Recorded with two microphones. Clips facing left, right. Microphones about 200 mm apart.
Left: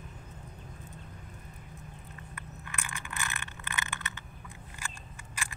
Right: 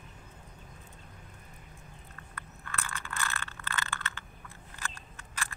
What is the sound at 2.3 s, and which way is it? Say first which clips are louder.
Vehicle: right 3 dB; 15° left (ahead or behind).